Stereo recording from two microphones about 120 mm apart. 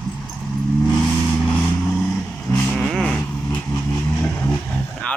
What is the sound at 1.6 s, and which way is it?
Vehicle, 15° left (ahead or behind).